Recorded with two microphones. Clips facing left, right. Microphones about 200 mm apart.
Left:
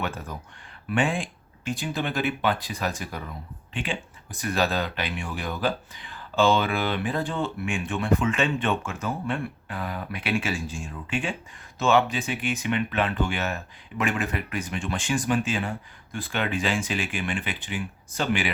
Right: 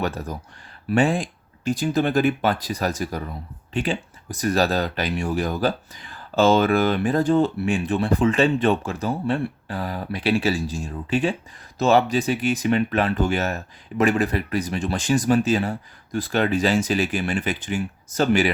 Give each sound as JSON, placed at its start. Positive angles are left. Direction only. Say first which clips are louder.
{"t": 0.0, "sound": "speech", "louder": "right 5 dB", "side_deg": -40}